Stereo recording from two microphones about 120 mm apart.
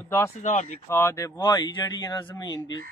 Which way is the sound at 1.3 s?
35° left (ahead or behind).